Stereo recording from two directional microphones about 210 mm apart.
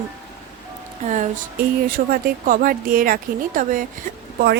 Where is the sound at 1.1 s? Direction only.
35° right (ahead or behind).